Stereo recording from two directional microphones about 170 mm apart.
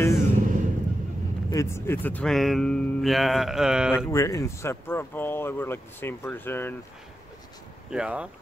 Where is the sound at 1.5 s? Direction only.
15° left (ahead or behind); by 3.9 s 5° right (ahead or behind).